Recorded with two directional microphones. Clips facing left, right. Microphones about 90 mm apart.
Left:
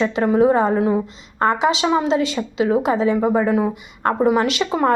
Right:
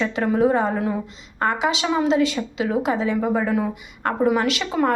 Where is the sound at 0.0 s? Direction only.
25° left (ahead or behind).